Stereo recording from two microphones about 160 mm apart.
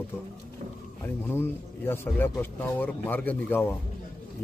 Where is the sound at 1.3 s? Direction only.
15° left (ahead or behind).